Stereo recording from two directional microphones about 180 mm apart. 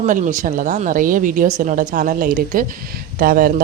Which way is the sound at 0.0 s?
45° right (ahead or behind).